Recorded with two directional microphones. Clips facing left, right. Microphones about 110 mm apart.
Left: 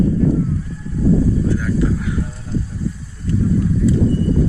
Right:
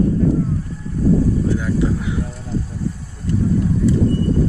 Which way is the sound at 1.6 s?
20° right (ahead or behind).